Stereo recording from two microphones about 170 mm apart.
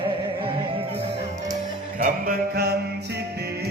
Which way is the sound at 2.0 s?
55° right (ahead or behind).